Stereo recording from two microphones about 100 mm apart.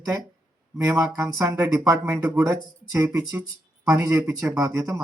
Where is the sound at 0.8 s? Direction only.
30° right (ahead or behind).